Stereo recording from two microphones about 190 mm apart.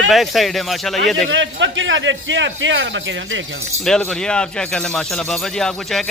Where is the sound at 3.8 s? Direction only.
5° left (ahead or behind).